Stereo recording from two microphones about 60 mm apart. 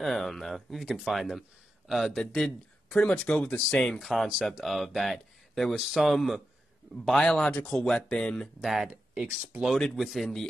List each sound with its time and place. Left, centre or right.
0.0 s speech: centre
2.9 s speech: centre
3.6 s speech: centre
7.1 s speech: centre
8.6 s speech: centre